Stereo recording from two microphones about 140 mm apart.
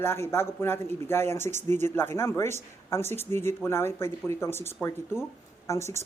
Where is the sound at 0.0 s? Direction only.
20° left (ahead or behind).